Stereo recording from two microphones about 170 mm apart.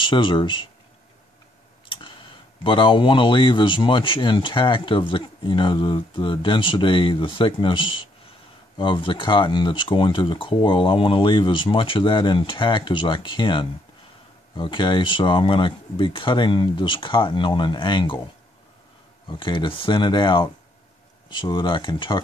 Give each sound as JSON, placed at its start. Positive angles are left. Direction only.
{"t": 0.0, "sound": "speech", "side_deg": 30}
{"t": 1.9, "sound": "tick", "side_deg": 30}
{"t": 2.6, "sound": "speech", "side_deg": 30}
{"t": 19.2, "sound": "speech", "side_deg": 30}